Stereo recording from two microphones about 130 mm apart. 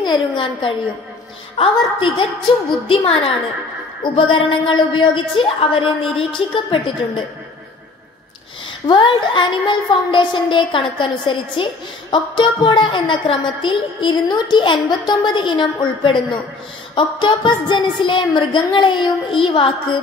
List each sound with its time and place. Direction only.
0.0 s a woman's voice: 35° left (ahead or behind)
8.8 s a woman's voice: 35° left (ahead or behind)